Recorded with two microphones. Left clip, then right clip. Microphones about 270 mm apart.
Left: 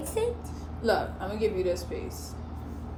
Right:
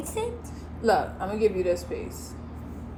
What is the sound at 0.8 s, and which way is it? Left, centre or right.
Speech, right.